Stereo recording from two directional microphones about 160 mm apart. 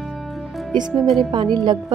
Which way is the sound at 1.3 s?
30° right (ahead or behind).